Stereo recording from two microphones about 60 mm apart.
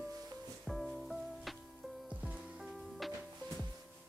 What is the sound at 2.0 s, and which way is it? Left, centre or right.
Music, centre.